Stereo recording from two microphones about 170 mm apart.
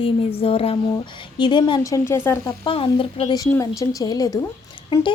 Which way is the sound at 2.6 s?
30° left (ahead or behind).